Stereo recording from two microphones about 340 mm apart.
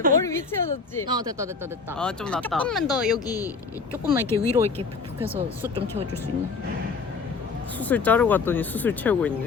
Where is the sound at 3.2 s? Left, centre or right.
Centre.